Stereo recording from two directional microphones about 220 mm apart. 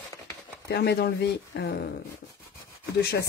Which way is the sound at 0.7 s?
45° left (ahead or behind).